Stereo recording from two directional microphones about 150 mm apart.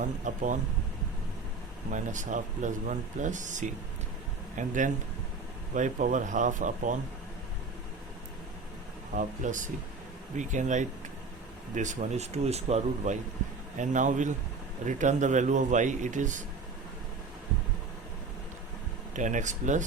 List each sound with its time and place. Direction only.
0.0 s speech: 55° right (ahead or behind)
1.9 s speech: 55° right (ahead or behind)
9.1 s speech: 55° right (ahead or behind)
19.1 s speech: 55° right (ahead or behind)